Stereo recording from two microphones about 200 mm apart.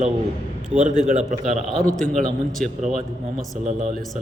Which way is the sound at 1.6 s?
Centre (ahead or behind).